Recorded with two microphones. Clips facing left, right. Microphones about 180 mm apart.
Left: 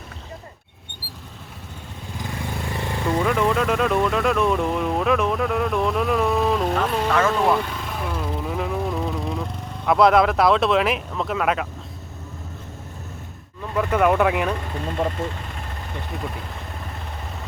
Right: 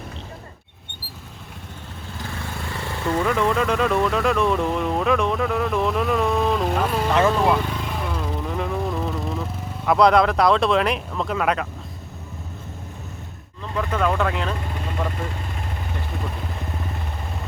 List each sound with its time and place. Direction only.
2.7 s vehicle: 15° left (ahead or behind)
3.2 s vehicle: centre (ahead or behind)
7.1 s vehicle: 20° right (ahead or behind)
7.3 s vehicle: centre (ahead or behind)
13.7 s speech: 15° left (ahead or behind)
15.0 s speech: 30° left (ahead or behind)